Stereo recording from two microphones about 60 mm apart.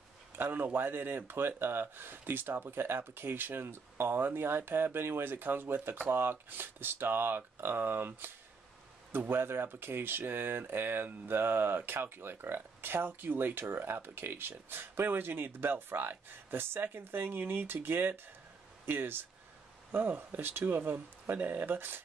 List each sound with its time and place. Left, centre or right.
0.4 s speech: right